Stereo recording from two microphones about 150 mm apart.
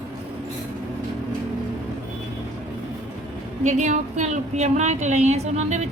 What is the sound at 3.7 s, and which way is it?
Speech, 55° right (ahead or behind).